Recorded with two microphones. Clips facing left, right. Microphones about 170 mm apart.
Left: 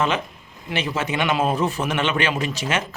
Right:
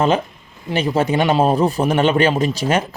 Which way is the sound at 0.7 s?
35° right (ahead or behind).